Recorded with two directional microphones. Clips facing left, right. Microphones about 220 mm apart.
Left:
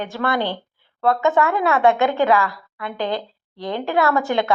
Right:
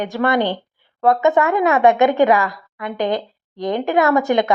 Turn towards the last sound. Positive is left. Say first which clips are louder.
# right 4 dB
turn(degrees=-20)  # may be behind; listen again after turning